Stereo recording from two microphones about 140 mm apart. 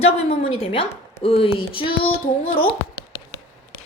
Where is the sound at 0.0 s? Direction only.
45° left (ahead or behind).